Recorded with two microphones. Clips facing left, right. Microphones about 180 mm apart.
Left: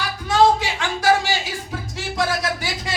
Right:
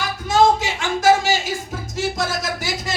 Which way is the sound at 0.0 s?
45° right (ahead or behind).